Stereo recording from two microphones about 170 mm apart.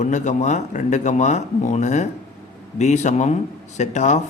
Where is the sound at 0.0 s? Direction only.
45° left (ahead or behind).